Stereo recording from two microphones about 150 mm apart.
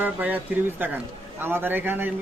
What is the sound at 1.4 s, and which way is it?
Speech, 15° right (ahead or behind).